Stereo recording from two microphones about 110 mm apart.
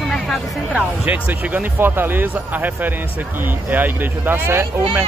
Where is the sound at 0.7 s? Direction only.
15° right (ahead or behind).